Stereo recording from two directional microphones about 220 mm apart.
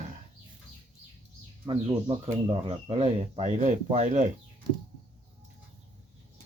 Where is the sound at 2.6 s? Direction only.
25° right (ahead or behind).